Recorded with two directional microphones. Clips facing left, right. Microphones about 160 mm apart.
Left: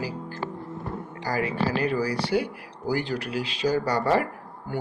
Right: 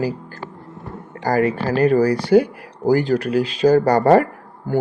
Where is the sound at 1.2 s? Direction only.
50° right (ahead or behind).